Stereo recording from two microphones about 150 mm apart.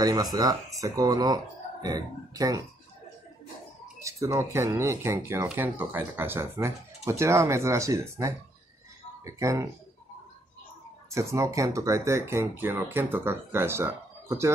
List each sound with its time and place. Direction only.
0.0 s speech: 25° right (ahead or behind)
4.0 s speech: 20° right (ahead or behind)
11.1 s speech: 20° right (ahead or behind)